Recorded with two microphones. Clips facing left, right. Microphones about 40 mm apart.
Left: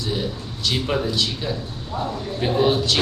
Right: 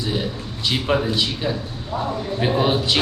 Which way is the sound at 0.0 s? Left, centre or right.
Centre.